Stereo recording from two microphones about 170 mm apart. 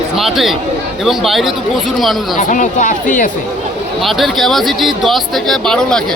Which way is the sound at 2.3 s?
50° left (ahead or behind).